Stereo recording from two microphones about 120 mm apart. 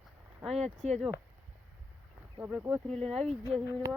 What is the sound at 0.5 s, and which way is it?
Speech, 65° right (ahead or behind).